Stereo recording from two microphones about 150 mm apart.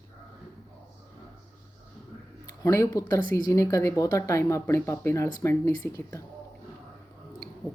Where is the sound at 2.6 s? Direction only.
20° left (ahead or behind).